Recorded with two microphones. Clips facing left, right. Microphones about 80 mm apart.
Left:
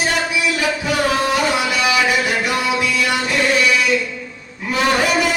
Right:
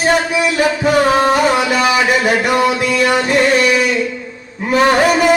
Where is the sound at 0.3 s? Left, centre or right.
Right.